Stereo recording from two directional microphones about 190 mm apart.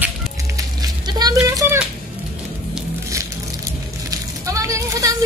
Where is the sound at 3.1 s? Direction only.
15° right (ahead or behind).